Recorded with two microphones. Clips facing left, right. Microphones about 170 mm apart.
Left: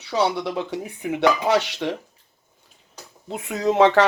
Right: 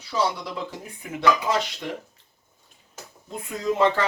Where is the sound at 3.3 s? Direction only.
75° left (ahead or behind).